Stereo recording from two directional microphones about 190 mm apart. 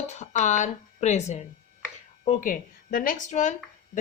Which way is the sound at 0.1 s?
40° left (ahead or behind).